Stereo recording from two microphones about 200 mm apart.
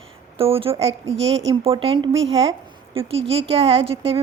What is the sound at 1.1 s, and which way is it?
Speech, 65° right (ahead or behind).